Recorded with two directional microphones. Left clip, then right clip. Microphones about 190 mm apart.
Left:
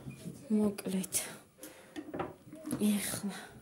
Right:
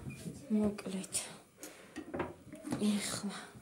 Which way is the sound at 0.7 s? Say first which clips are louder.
Left 3 dB; 50° left (ahead or behind).